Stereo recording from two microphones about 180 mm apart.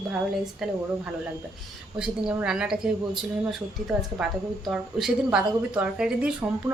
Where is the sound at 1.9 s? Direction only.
5° right (ahead or behind).